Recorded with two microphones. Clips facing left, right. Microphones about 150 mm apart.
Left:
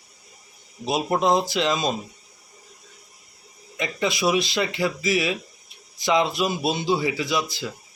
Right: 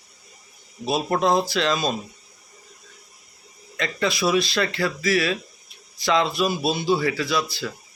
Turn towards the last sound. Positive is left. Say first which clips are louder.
# right 1 dB
turn(degrees=20)  # may be behind; listen again after turning